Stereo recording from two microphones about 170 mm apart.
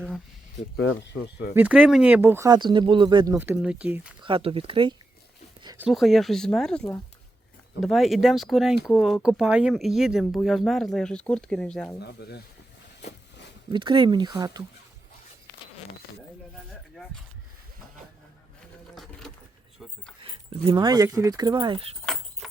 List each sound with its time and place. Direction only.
0.8 s speech: 75° left (ahead or behind)
1.5 s speech: 5° right (ahead or behind); by 3.3 s 25° right (ahead or behind)
3.3 s speech: 10° right (ahead or behind)
4.2 s speech: 30° right (ahead or behind)
5.9 s speech: centre (ahead or behind)
11.9 s speech: 75° left (ahead or behind)
13.0 s walk: 40° left (ahead or behind)
13.7 s speech: 30° right (ahead or behind)
19.8 s keys jangling: centre (ahead or behind)
20.2 s keys jangling: 35° right (ahead or behind)
20.8 s speech: 20° right (ahead or behind)
22.0 s keys jangling: centre (ahead or behind)